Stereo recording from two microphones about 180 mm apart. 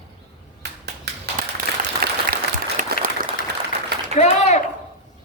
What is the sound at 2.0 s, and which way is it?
Applause, 55° right (ahead or behind).